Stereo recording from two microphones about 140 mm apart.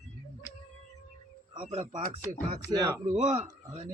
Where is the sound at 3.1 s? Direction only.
60° right (ahead or behind).